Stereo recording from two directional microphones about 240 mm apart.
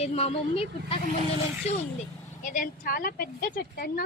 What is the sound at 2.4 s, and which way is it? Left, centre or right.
Speech, left.